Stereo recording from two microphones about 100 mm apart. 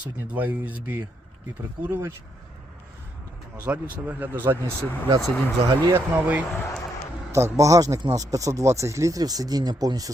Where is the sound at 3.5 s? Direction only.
15° right (ahead or behind).